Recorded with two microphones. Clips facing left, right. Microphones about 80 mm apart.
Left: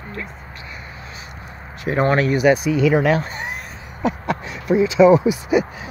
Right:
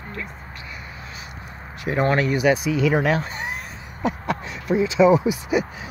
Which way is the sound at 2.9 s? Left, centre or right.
Left.